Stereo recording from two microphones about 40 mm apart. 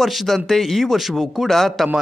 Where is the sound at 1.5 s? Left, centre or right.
Centre.